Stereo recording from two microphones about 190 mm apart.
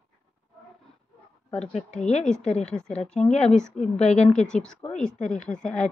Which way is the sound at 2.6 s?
5° left (ahead or behind).